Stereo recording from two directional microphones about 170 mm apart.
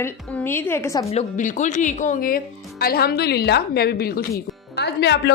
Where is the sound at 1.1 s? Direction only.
45° left (ahead or behind); by 4.3 s 65° left (ahead or behind).